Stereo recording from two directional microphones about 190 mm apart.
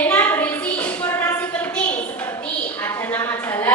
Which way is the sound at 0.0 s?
10° left (ahead or behind).